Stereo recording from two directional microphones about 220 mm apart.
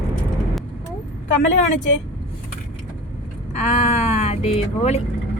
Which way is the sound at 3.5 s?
30° left (ahead or behind).